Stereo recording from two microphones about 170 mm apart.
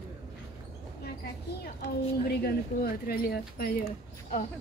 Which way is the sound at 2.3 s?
65° left (ahead or behind).